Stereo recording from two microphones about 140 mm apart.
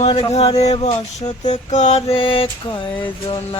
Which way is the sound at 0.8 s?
30° left (ahead or behind).